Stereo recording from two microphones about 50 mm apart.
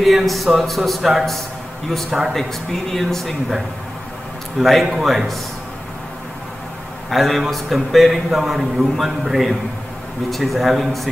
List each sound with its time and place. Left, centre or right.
0.0 s a man's voice: centre
4.6 s a man's voice: centre
7.1 s a man's voice: centre